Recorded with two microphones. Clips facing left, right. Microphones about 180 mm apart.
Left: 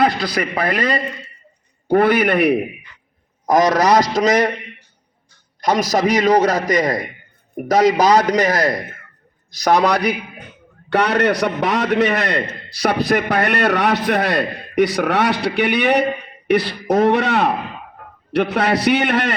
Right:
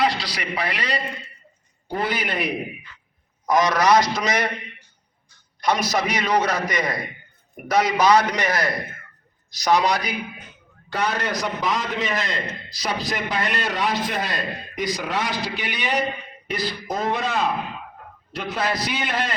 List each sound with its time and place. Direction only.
0.0 s a man's voice: 50° left (ahead or behind)
1.9 s a man's voice: 60° left (ahead or behind)
3.4 s a man's voice: 45° left (ahead or behind)
5.5 s a man's voice: 40° left (ahead or behind)
9.5 s a man's voice: 50° left (ahead or behind)